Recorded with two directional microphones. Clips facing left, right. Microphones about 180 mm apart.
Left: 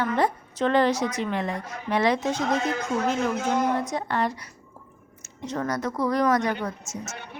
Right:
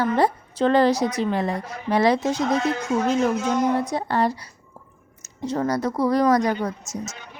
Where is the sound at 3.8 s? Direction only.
35° right (ahead or behind).